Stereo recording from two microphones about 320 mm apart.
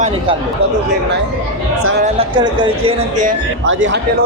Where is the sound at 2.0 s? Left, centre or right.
Centre.